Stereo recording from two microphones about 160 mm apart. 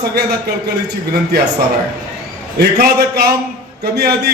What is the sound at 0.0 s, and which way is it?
Speech, 80° right.